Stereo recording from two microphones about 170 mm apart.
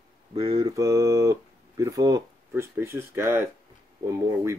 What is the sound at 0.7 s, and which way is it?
Speech, 20° right (ahead or behind).